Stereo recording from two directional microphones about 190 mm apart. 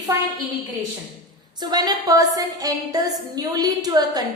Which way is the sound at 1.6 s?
20° right (ahead or behind).